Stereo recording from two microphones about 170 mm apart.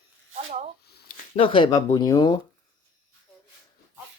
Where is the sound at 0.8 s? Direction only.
70° left (ahead or behind).